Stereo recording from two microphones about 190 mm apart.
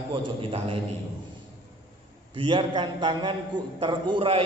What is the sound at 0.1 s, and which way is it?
Speech, 30° right (ahead or behind).